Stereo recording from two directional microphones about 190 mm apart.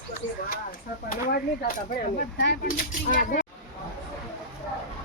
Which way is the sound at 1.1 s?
50° left (ahead or behind).